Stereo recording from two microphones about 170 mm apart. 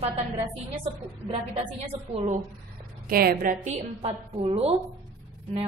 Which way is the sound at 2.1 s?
40° right (ahead or behind).